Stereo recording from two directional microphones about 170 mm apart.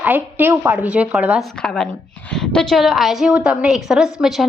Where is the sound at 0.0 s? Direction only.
10° right (ahead or behind).